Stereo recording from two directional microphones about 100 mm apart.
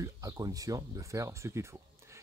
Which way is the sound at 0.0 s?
40° right (ahead or behind).